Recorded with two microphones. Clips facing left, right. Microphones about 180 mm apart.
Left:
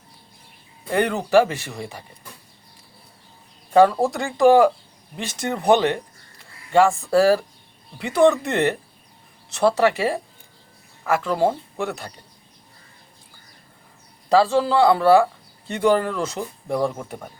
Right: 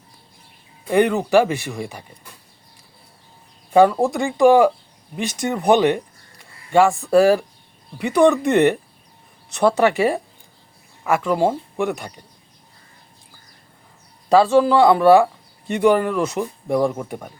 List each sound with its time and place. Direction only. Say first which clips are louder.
0.9 s speech: right 4 dB; 15° right (ahead or behind)
3.7 s speech: right 1 dB; 15° right (ahead or behind)
14.3 s speech: right 4 dB; 20° right (ahead or behind)